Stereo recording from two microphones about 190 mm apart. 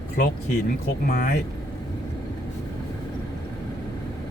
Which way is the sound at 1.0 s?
50° left (ahead or behind).